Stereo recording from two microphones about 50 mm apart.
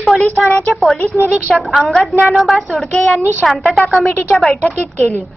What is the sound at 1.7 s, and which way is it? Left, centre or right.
A woman's voice, centre.